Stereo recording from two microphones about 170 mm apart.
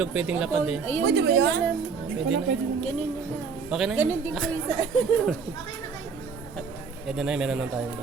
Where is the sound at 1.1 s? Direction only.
75° right (ahead or behind).